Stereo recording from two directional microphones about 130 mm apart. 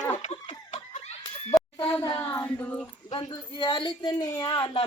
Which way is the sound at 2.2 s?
15° left (ahead or behind).